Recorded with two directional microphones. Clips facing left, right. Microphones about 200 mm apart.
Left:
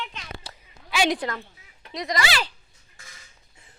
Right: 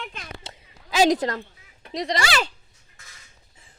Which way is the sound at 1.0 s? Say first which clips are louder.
Right 5 dB; 40° right (ahead or behind).